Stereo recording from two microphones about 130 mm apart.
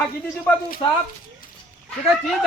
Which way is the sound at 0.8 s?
35° left (ahead or behind).